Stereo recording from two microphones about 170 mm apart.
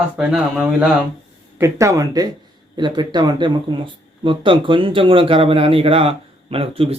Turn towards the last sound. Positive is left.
turn(degrees=-35)  # may be behind; listen again after turning